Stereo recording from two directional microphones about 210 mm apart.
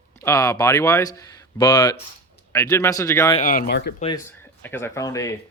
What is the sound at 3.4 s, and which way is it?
Speech, 40° left (ahead or behind).